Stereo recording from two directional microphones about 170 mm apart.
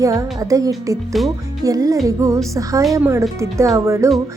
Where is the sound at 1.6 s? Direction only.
20° right (ahead or behind).